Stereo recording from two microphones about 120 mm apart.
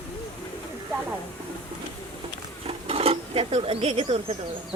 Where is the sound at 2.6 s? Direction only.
55° right (ahead or behind).